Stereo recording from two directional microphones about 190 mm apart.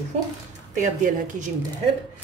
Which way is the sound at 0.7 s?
40° right (ahead or behind).